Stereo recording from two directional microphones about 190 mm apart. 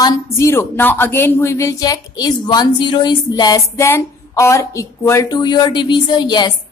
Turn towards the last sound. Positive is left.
turn(degrees=25)  # may be behind; listen again after turning